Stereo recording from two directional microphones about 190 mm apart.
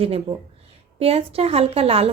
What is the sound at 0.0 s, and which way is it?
Speech, 30° right (ahead or behind).